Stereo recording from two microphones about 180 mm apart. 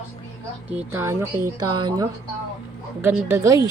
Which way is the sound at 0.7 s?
15° right (ahead or behind).